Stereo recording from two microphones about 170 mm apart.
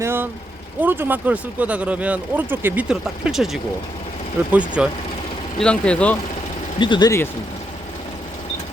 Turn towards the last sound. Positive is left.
turn(degrees=30)  # may be behind; listen again after turning